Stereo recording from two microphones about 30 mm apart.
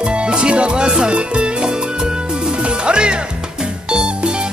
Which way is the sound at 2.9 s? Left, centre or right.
Right.